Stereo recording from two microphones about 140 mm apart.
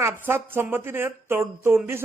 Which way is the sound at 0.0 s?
15° right (ahead or behind).